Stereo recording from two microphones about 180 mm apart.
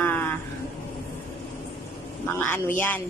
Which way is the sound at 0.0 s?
10° left (ahead or behind).